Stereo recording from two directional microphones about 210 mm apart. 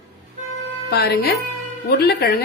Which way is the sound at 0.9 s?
45° left (ahead or behind).